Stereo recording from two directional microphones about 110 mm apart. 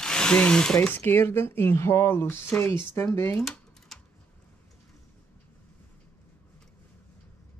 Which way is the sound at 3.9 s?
Centre (ahead or behind).